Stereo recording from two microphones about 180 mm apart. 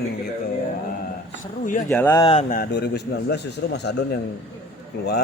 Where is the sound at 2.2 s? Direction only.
30° left (ahead or behind).